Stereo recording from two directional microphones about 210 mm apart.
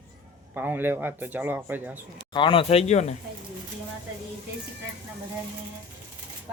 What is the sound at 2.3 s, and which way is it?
Speech, 25° left (ahead or behind).